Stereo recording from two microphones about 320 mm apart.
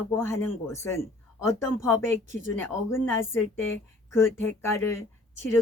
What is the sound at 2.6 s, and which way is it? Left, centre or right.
Speech, centre.